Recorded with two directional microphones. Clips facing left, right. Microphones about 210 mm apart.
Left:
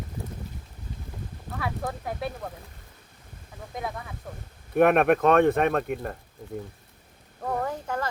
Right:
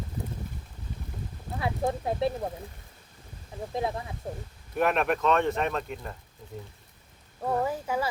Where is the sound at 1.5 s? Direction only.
25° right (ahead or behind).